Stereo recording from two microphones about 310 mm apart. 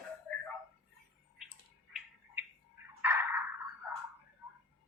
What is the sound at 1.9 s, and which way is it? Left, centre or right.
Bird, centre.